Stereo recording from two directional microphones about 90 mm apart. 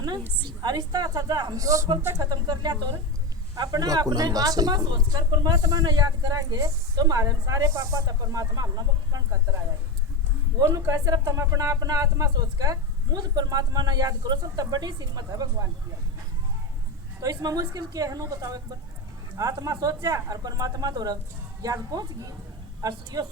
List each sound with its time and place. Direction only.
0.4 s a woman's voice: 50° right (ahead or behind)
2.0 s speech: 25° right (ahead or behind)
2.2 s a woman's voice: 50° right (ahead or behind)
10.6 s a woman's voice: 35° right (ahead or behind)
17.2 s speech: 40° right (ahead or behind)
19.6 s a woman's voice: 40° right (ahead or behind)